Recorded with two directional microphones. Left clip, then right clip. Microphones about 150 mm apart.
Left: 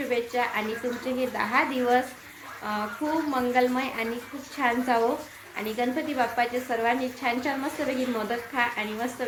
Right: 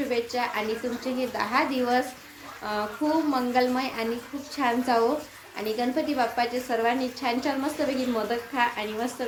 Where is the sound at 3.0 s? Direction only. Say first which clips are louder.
Right 2 dB; 25° right (ahead or behind).